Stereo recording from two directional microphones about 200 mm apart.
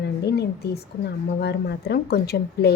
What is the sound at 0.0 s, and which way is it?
A woman's voice, 55° left (ahead or behind).